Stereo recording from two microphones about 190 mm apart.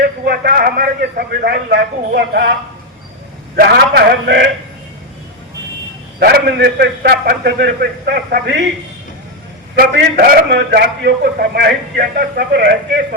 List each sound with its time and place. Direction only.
0.0 s a man's voice: 55° right (ahead or behind)
3.5 s a man's voice: 55° right (ahead or behind)
6.1 s a man's voice: 55° right (ahead or behind)
9.7 s a man's voice: 50° right (ahead or behind)